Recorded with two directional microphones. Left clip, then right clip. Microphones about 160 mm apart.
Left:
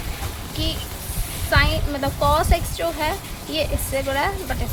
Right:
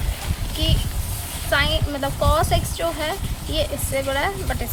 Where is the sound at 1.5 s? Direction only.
10° right (ahead or behind).